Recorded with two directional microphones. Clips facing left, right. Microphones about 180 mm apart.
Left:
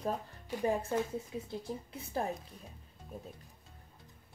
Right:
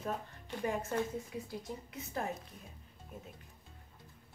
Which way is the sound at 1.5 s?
30° left (ahead or behind).